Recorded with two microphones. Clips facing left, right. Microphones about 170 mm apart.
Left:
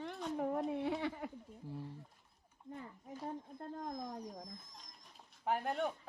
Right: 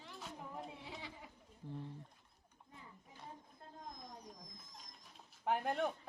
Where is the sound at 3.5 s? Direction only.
55° left (ahead or behind).